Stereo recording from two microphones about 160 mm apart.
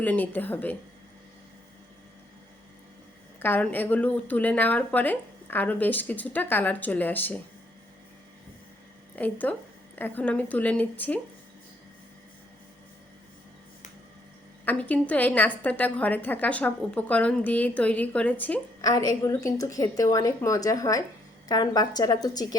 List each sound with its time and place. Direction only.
0.0 s a woman's voice: 10° left (ahead or behind)
3.4 s a woman's voice: 10° left (ahead or behind)
9.1 s a woman's voice: 10° left (ahead or behind)
14.6 s a woman's voice: 10° left (ahead or behind)
18.8 s a woman's voice: 20° left (ahead or behind)